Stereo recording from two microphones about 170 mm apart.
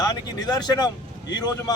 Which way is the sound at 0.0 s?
20° left (ahead or behind).